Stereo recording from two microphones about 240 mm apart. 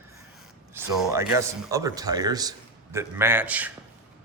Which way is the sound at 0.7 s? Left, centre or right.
Centre.